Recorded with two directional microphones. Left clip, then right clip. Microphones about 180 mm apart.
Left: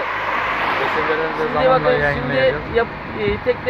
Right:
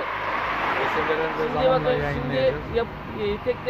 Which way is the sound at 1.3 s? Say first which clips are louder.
Left 7 dB; centre (ahead or behind).